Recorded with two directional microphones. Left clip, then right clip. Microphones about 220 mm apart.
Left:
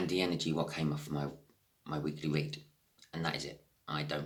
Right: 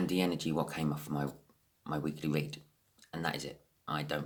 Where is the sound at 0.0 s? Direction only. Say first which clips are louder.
Even; 45° right (ahead or behind).